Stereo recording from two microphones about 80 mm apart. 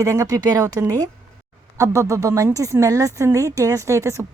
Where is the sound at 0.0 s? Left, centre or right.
Right.